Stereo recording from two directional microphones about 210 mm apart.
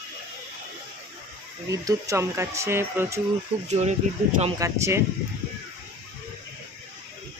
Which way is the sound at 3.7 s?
30° right (ahead or behind).